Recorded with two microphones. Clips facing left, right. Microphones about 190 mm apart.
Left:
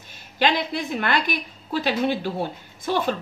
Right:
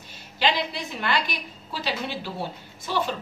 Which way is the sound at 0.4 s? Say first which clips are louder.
Left 3 dB; 50° left (ahead or behind).